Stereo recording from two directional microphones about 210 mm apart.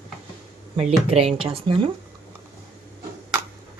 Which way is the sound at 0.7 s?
25° right (ahead or behind).